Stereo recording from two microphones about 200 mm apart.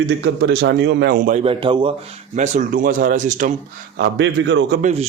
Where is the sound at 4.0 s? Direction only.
65° right (ahead or behind).